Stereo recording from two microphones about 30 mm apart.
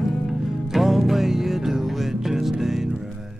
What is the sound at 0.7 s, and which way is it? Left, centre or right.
Music, centre.